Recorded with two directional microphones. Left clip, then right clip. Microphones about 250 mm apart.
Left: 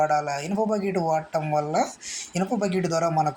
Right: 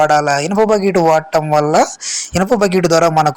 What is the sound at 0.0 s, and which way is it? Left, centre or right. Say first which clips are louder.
Speech: right 11 dB; right.